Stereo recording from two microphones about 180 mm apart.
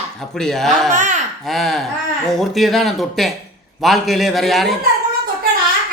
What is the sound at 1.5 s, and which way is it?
Speech, centre (ahead or behind).